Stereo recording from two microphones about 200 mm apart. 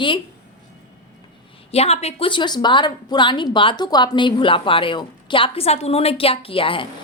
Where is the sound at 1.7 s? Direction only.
30° left (ahead or behind).